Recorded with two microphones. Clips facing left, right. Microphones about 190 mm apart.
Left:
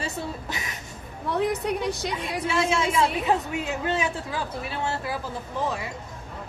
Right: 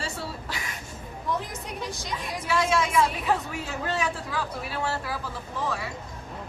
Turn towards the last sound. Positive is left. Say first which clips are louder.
# left 2 dB
turn(degrees=20)  # may be behind; listen again after turning